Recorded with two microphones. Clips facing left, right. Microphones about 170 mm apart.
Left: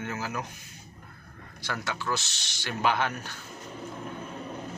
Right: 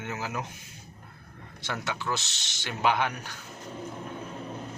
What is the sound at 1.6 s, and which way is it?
Speech, 20° right (ahead or behind).